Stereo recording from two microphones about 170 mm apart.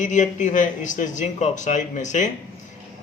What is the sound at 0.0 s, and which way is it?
A man's voice, 45° left (ahead or behind).